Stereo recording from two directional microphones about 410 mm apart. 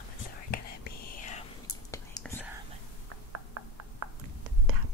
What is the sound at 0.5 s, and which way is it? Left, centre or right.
Whispering, left.